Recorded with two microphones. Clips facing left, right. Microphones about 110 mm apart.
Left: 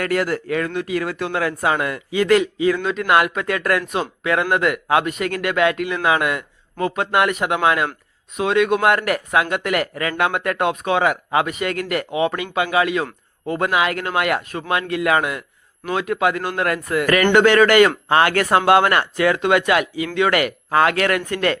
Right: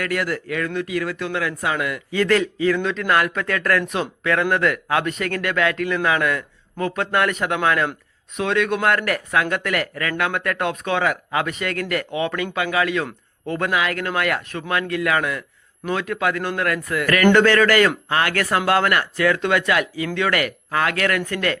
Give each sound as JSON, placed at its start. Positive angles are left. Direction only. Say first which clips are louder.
{"t": 0.0, "sound": "speech", "louder": "left 3 dB", "side_deg": 30}
{"t": 2.1, "sound": "a man's voice", "louder": "left 3 dB", "side_deg": 15}